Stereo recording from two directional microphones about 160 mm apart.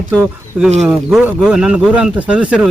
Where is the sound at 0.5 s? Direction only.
10° right (ahead or behind).